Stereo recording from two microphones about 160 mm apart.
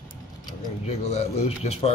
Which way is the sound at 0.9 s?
45° left (ahead or behind).